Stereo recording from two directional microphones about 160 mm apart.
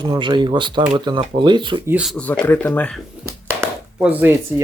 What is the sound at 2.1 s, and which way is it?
Speech, 10° left (ahead or behind).